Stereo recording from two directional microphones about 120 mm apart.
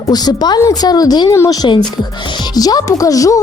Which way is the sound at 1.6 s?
40° left (ahead or behind).